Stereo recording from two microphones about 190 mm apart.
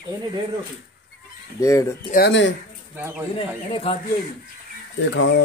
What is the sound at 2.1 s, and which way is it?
Speech, 65° left (ahead or behind).